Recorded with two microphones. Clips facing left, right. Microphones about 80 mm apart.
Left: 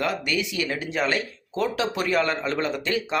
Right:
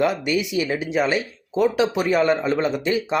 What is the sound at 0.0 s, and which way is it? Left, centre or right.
Speech, centre.